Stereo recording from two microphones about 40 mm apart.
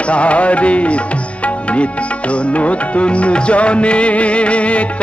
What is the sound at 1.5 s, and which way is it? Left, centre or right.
Music, left.